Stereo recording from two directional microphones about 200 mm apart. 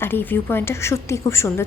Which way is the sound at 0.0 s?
10° left (ahead or behind).